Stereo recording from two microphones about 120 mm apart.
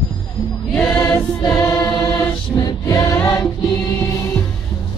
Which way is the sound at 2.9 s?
30° left (ahead or behind).